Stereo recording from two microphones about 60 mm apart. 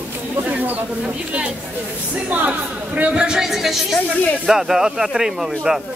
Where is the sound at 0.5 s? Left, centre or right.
Right.